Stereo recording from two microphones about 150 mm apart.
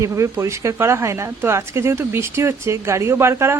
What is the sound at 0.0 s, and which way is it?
Speech, 20° right (ahead or behind).